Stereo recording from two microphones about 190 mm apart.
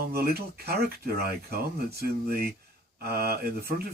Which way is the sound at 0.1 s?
55° right (ahead or behind).